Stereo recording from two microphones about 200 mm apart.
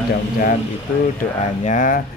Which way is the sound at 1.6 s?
40° left (ahead or behind).